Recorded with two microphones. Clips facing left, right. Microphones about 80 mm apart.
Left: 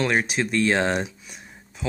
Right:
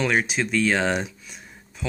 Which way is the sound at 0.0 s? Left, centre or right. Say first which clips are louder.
Even; centre.